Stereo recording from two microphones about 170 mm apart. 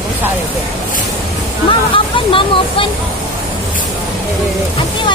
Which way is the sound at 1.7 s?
30° left (ahead or behind).